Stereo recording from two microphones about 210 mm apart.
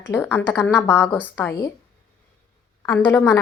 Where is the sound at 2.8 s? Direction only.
10° left (ahead or behind).